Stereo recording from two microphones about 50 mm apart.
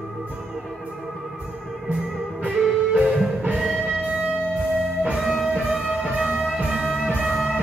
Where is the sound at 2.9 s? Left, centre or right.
Right.